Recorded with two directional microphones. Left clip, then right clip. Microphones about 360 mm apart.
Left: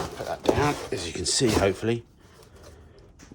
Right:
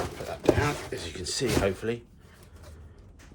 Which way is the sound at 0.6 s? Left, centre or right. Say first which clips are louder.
Left 4 dB; left.